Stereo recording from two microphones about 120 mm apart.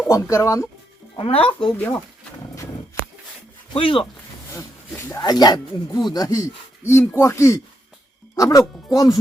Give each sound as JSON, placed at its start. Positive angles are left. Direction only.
{"t": 0.1, "sound": "speech", "side_deg": 25}
{"t": 1.1, "sound": "speech", "side_deg": 50}
{"t": 1.7, "sound": "speech", "side_deg": 15}
{"t": 3.8, "sound": "speech", "side_deg": 50}
{"t": 5.2, "sound": "speech", "side_deg": 35}